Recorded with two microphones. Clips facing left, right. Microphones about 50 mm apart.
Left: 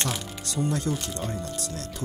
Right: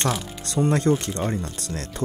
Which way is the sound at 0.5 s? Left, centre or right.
Right.